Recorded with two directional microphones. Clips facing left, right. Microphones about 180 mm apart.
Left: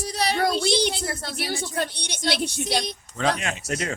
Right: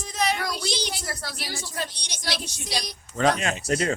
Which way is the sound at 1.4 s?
60° left (ahead or behind).